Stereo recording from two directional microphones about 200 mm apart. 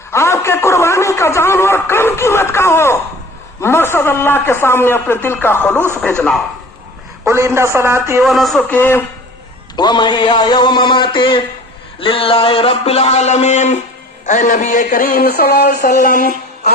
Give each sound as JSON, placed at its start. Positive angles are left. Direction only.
{"t": 0.1, "sound": "a man's voice", "side_deg": 15}
{"t": 7.3, "sound": "a man's voice", "side_deg": -15}
{"t": 8.2, "sound": "speech", "side_deg": 0}
{"t": 9.7, "sound": "speech", "side_deg": 20}